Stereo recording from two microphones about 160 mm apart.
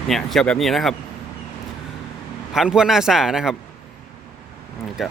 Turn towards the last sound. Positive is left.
turn(degrees=0)  # may be behind; listen again after turning